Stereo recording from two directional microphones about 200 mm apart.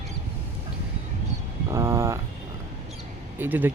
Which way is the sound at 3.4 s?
10° right (ahead or behind).